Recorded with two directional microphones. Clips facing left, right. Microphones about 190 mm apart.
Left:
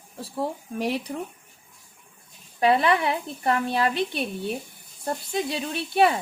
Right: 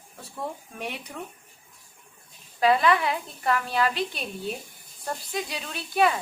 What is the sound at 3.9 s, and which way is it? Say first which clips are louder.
Speech: left 4 dB; 60° left (ahead or behind).